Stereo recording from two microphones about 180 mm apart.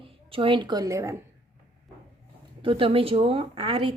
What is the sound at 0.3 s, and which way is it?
Speech, 30° right (ahead or behind).